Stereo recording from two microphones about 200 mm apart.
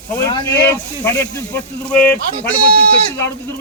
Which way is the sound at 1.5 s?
5° left (ahead or behind).